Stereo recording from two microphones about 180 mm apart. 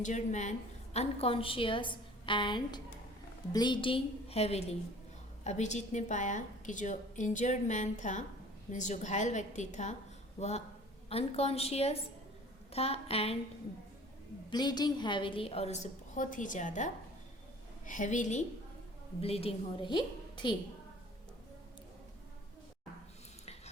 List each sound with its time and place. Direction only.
0.0 s a woman's voice: 40° left (ahead or behind)
14.5 s a woman's voice: 25° left (ahead or behind)